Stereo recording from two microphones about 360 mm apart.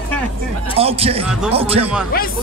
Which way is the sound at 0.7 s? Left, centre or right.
Centre.